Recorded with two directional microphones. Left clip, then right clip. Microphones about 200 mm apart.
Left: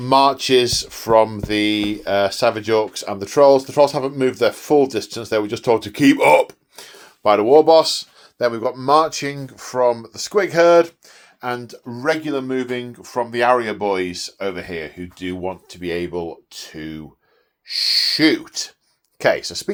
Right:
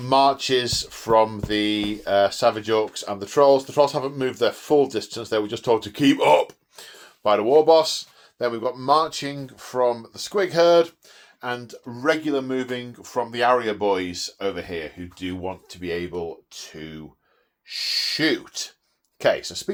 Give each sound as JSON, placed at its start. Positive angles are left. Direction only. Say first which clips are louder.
{"t": 0.0, "sound": "speech", "louder": "left 3 dB", "side_deg": 30}